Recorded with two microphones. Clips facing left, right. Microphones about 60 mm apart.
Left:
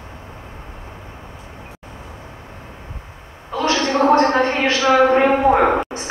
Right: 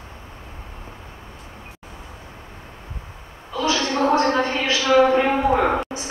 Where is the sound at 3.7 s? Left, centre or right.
Left.